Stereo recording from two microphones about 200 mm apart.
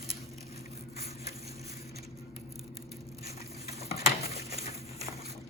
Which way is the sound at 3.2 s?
15° right (ahead or behind).